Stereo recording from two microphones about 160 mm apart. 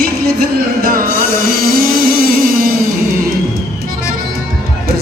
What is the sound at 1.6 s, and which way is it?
Music, 65° right (ahead or behind).